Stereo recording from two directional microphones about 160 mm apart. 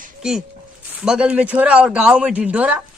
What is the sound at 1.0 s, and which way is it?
A man's voice, 5° right (ahead or behind).